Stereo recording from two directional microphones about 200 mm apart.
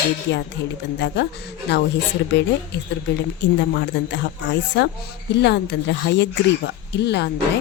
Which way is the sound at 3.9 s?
60° left (ahead or behind).